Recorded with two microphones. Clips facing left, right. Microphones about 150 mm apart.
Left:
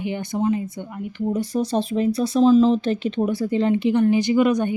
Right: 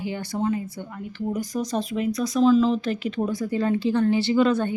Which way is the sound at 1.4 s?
30° left (ahead or behind).